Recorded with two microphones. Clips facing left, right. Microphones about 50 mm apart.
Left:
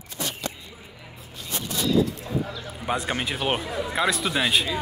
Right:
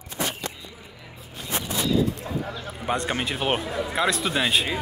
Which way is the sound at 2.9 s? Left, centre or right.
Centre.